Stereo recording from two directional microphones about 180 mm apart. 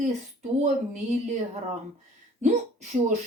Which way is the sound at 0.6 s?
40° right (ahead or behind).